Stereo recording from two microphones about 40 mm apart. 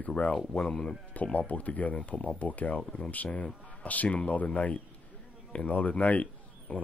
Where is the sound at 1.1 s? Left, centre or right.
Left.